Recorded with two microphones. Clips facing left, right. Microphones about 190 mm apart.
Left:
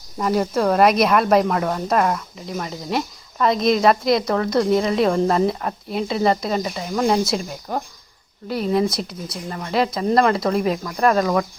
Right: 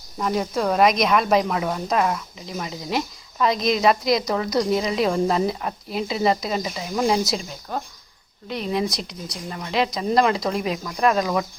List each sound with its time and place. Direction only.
0.2 s speech: centre (ahead or behind)
7.7 s speech: 15° left (ahead or behind)
8.4 s speech: 5° left (ahead or behind)